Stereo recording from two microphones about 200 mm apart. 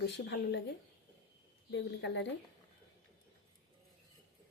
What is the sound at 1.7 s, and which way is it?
Speech, 60° left (ahead or behind).